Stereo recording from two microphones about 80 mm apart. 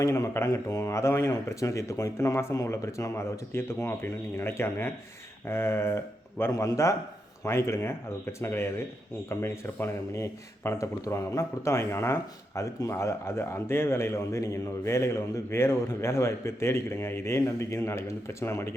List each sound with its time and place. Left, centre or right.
0.0 s speech: left
5.5 s a sound: left
6.5 s speech: left